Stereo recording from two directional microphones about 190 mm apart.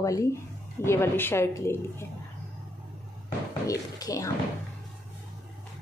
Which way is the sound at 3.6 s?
15° left (ahead or behind).